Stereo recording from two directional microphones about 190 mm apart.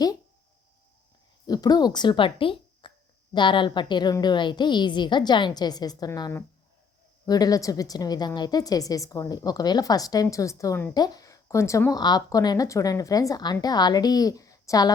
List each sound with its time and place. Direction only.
1.5 s a woman's voice: 20° left (ahead or behind)